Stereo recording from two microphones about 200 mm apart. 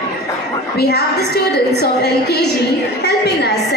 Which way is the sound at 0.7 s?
55° left (ahead or behind).